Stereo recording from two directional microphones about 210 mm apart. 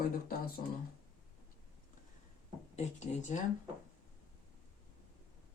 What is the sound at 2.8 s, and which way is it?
Speech, 35° left (ahead or behind).